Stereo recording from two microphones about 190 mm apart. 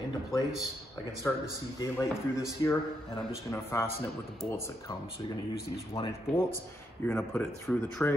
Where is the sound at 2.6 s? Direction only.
20° left (ahead or behind).